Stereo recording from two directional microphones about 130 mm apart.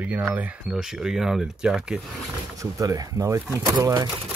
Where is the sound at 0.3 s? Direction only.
10° right (ahead or behind).